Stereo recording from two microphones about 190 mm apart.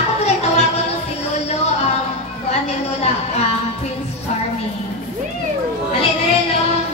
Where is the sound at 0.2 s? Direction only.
35° left (ahead or behind).